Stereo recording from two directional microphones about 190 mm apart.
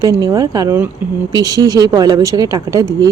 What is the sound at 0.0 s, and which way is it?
Speech, 20° right (ahead or behind).